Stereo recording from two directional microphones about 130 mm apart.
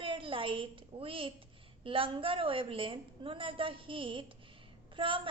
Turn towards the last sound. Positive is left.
turn(degrees=-40)  # may be behind; listen again after turning